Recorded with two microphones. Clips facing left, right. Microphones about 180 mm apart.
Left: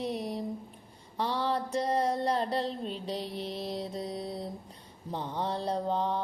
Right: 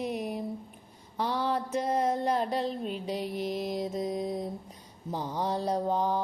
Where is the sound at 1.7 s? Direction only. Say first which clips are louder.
Even; 5° right (ahead or behind).